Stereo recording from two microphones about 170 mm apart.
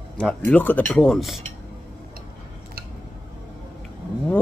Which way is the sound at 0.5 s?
10° left (ahead or behind).